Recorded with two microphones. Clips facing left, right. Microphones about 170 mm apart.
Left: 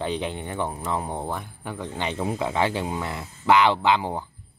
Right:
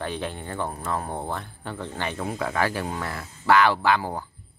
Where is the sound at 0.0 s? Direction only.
20° left (ahead or behind).